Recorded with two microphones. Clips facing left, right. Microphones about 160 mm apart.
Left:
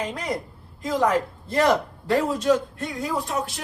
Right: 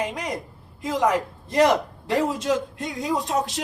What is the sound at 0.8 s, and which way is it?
A woman's voice, 15° right (ahead or behind).